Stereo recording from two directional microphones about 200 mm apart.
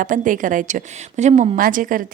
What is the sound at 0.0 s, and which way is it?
Speech, 40° right (ahead or behind).